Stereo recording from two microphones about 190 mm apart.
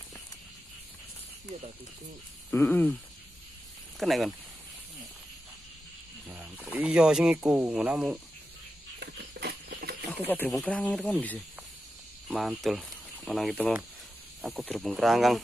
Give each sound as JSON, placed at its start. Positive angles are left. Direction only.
{"t": 2.5, "sound": "speech", "side_deg": 10}
{"t": 4.0, "sound": "speech", "side_deg": 0}
{"t": 6.2, "sound": "speech", "side_deg": -10}
{"t": 9.0, "sound": "patter", "side_deg": -60}
{"t": 10.2, "sound": "speech", "side_deg": 10}